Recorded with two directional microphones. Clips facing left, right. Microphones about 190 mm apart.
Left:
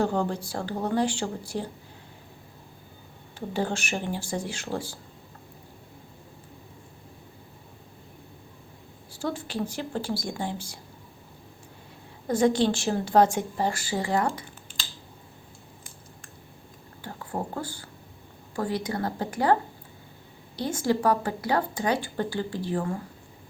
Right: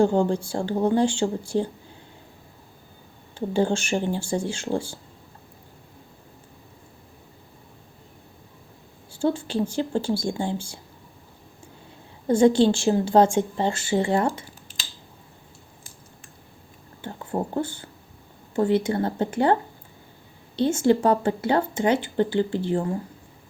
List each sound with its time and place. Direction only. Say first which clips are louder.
0.0 s speech: right 6 dB; 30° right (ahead or behind)
3.3 s speech: right 6 dB; 30° right (ahead or behind)
9.1 s speech: right 7 dB; 30° right (ahead or behind)
12.3 s speech: right 5 dB; 30° right (ahead or behind)
17.0 s speech: right 5 dB; 25° right (ahead or behind)
20.6 s speech: right 6 dB; 25° right (ahead or behind)